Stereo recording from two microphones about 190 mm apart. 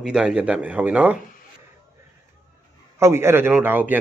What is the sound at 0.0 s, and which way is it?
Speech, 5° right (ahead or behind).